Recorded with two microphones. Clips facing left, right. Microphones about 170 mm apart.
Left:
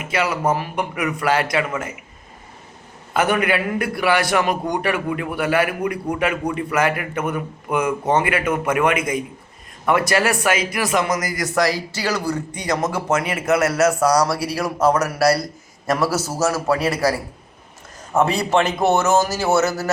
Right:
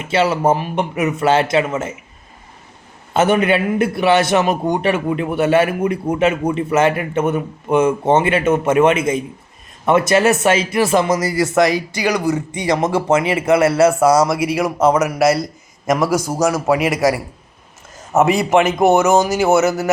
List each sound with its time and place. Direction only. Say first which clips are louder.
0.0 s a man's voice: right 5 dB; 25° right (ahead or behind)
3.1 s a man's voice: right 4 dB; 25° right (ahead or behind)
12.5 s a man's voice: right 5 dB; 25° right (ahead or behind)